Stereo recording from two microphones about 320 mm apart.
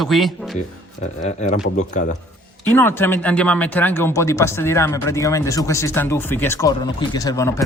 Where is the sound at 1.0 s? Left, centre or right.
Left.